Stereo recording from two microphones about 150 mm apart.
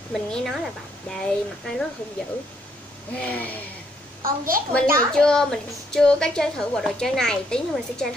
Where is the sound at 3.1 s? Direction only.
10° left (ahead or behind).